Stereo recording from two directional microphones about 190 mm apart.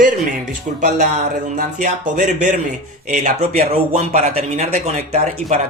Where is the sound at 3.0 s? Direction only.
40° right (ahead or behind).